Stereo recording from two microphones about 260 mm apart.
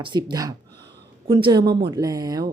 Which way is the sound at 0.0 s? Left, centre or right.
Centre.